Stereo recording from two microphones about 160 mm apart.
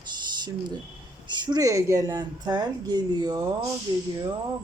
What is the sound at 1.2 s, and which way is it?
A woman's voice, 25° right (ahead or behind).